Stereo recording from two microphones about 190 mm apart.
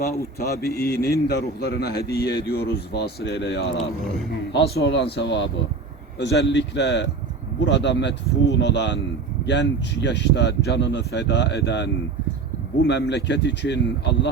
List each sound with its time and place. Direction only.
0.0 s a man's voice: 55° left (ahead or behind)
12.9 s a man's voice: 65° left (ahead or behind)